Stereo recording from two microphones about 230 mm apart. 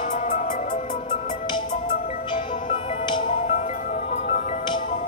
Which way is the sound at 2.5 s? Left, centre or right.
Left.